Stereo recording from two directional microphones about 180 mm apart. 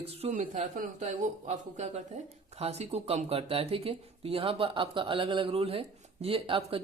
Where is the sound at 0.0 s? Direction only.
40° right (ahead or behind).